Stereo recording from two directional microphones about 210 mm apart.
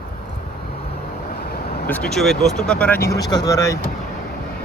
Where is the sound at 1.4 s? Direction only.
50° left (ahead or behind).